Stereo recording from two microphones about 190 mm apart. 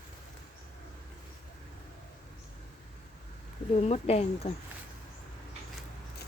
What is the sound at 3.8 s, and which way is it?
Speech, 35° left (ahead or behind).